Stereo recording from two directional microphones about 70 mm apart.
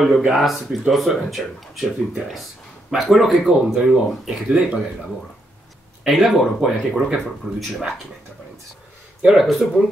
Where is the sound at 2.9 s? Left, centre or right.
Centre.